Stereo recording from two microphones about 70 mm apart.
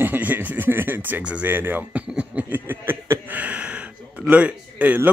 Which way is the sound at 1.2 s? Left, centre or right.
Centre.